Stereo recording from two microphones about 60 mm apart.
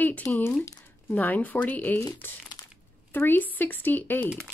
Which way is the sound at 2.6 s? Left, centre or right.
Left.